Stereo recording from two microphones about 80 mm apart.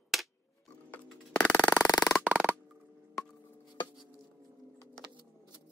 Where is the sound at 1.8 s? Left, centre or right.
Left.